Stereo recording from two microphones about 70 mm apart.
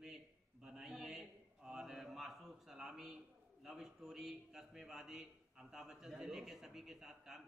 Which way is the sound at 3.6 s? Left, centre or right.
Centre.